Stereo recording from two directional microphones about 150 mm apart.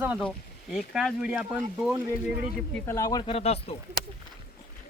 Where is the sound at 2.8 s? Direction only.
20° left (ahead or behind).